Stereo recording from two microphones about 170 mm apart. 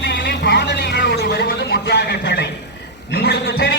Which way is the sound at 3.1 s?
85° left.